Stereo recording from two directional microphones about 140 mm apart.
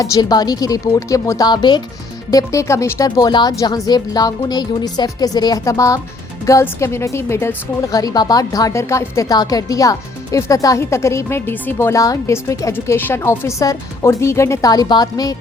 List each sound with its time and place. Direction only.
0.0 s a woman's voice: 25° left (ahead or behind)